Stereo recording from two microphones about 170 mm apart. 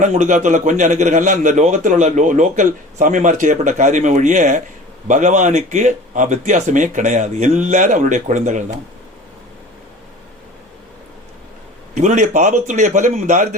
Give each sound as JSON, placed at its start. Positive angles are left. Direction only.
{"t": 0.0, "sound": "a man's voice", "side_deg": -45}
{"t": 11.9, "sound": "a man's voice", "side_deg": -45}